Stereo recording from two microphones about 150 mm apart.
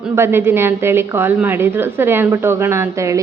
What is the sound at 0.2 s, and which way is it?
A woman's voice, 15° right (ahead or behind).